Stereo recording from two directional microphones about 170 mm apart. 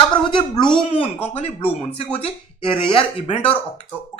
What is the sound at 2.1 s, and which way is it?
Speech, 30° left (ahead or behind).